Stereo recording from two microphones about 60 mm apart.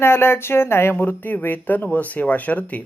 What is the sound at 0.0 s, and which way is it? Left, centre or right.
Speech, left.